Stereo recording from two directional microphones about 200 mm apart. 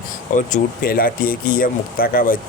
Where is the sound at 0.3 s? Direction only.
40° left (ahead or behind).